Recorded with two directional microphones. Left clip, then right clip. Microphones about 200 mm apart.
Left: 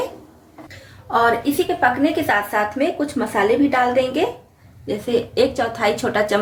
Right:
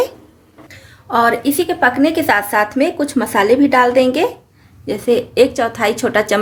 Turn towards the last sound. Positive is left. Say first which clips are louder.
# right 3 dB
turn(degrees=-40)  # may be behind; listen again after turning